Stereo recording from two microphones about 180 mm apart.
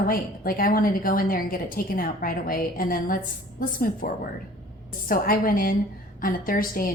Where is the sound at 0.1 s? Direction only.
55° left (ahead or behind).